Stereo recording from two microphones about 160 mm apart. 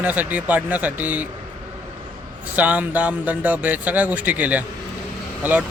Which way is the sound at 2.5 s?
10° right (ahead or behind).